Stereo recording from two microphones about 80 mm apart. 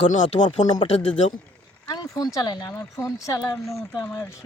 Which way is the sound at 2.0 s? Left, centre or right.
Left.